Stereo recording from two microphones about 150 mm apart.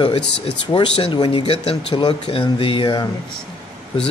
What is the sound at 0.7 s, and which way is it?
Speech, 30° left (ahead or behind).